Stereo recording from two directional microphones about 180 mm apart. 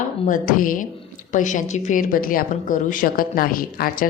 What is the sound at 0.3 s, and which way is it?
A woman's voice, 50° left (ahead or behind).